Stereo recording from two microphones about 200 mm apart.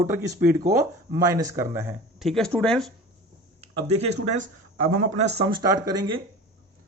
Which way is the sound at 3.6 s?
30° right (ahead or behind).